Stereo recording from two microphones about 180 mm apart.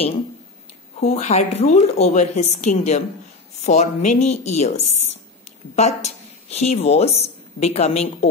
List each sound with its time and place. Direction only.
0.9 s a woman's voice: 45° left (ahead or behind)